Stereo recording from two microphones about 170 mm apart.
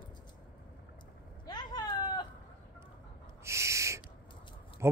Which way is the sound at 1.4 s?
25° left (ahead or behind).